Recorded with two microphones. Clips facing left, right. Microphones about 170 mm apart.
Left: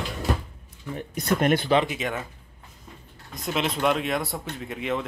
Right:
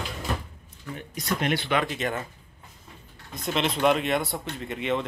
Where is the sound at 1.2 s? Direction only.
50° left (ahead or behind).